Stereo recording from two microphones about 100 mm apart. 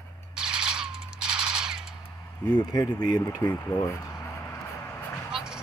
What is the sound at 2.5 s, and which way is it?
Speech, 40° left (ahead or behind).